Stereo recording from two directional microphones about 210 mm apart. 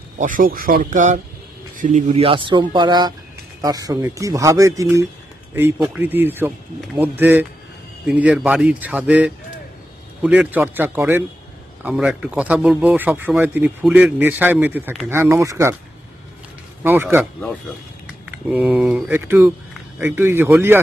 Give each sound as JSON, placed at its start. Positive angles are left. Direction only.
{"t": 0.2, "sound": "speech", "side_deg": -40}
{"t": 2.0, "sound": "a man's voice", "side_deg": -25}
{"t": 16.8, "sound": "a man's voice", "side_deg": -10}
{"t": 18.5, "sound": "a man's voice", "side_deg": -5}